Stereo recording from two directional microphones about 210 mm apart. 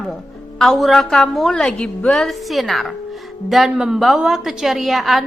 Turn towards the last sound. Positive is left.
turn(degrees=0)  # may be behind; listen again after turning